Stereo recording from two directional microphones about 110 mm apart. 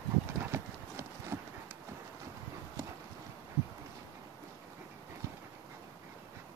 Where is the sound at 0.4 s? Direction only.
25° right (ahead or behind).